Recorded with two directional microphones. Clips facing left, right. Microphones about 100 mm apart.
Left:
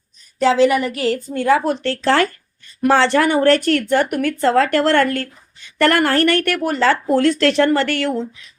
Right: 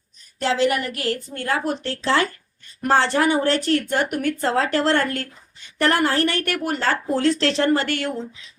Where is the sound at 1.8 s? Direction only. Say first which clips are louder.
Left 5 dB; 70° left (ahead or behind).